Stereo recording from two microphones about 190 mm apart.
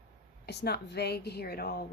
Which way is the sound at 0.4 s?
60° left (ahead or behind).